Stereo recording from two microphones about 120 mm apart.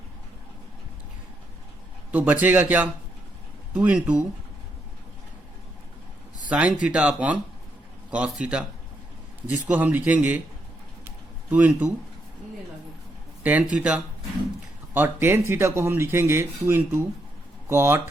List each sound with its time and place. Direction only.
2.1 s a man's voice: 15° right (ahead or behind)
6.5 s a man's voice: 10° right (ahead or behind)
11.5 s a man's voice: 15° right (ahead or behind)
13.4 s a man's voice: 10° right (ahead or behind)
14.9 s speech: 20° right (ahead or behind)